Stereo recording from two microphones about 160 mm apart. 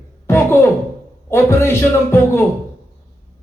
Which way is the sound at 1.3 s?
15° left (ahead or behind).